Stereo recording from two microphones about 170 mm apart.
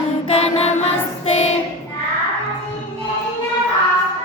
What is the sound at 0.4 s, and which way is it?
Music, 40° left (ahead or behind).